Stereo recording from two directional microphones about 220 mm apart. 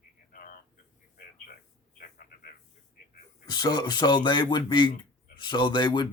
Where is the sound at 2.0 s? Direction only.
40° left (ahead or behind).